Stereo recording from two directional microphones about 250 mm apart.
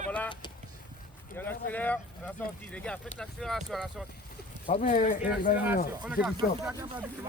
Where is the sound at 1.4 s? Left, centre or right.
Centre.